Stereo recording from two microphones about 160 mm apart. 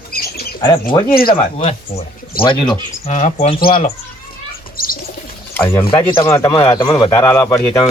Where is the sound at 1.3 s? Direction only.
40° left (ahead or behind).